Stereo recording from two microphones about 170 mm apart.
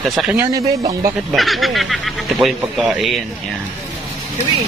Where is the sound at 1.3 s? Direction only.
Centre (ahead or behind).